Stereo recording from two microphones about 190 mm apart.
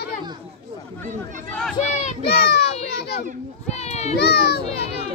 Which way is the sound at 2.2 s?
60° left (ahead or behind).